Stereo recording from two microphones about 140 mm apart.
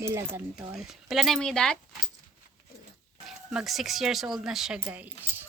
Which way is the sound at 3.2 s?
5° right (ahead or behind).